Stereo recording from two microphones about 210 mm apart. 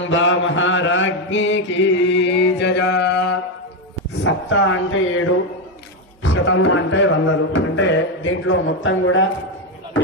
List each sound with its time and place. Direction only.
0.0 s mantra: 65° left (ahead or behind)
4.2 s music: 60° left (ahead or behind)